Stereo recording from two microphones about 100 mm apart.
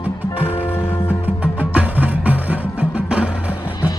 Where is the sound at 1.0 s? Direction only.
15° right (ahead or behind).